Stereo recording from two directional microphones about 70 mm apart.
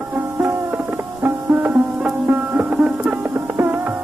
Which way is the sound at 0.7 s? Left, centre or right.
Right.